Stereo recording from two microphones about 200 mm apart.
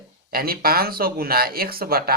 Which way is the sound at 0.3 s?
50° right (ahead or behind).